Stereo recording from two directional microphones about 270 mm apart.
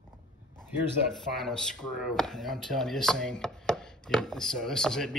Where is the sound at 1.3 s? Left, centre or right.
Centre.